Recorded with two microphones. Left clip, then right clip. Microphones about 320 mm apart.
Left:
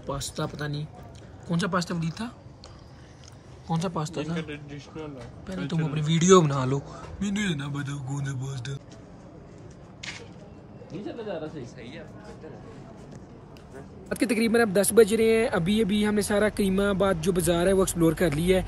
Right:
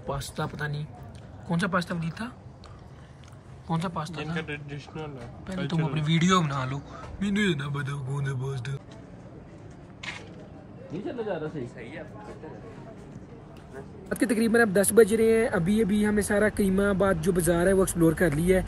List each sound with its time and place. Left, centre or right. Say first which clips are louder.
0.1 s speech: left 1 dB; centre
3.6 s speech: left 1 dB; centre
4.4 s a man's voice: right 2 dB; right
5.7 s speech: right 1 dB; centre
14.0 s speech: left 1 dB; centre